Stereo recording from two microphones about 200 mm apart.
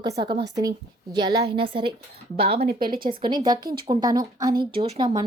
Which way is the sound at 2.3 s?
50° right (ahead or behind).